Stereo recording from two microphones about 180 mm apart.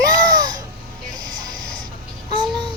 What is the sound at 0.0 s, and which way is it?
Music, 25° right (ahead or behind).